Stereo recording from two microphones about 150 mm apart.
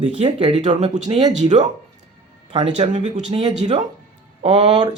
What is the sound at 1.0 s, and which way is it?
Speech, 30° right (ahead or behind).